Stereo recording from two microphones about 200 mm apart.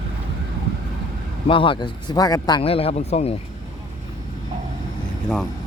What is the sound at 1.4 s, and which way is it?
A man's voice, 25° left (ahead or behind).